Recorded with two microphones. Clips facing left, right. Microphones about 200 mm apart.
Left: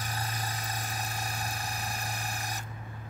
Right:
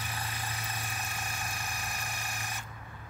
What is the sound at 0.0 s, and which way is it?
Vehicle, 40° left (ahead or behind).